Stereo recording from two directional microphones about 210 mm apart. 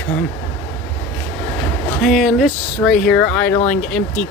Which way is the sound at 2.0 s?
Centre (ahead or behind).